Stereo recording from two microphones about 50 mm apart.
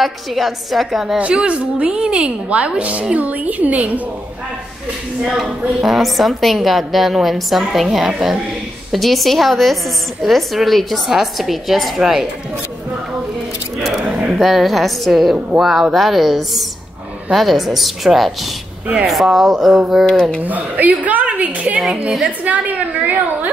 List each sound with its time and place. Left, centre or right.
0.0 s a woman's voice: centre
1.1 s a woman's voice: right
5.2 s a woman's voice: centre
14.0 s a sound: right
14.4 s a woman's voice: centre
20.1 s speech: centre
20.4 s a woman's voice: right